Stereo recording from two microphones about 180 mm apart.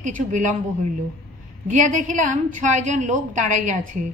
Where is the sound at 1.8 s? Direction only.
45° right (ahead or behind).